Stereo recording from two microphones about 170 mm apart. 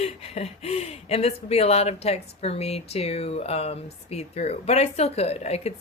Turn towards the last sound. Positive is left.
turn(degrees=40)  # may be behind; listen again after turning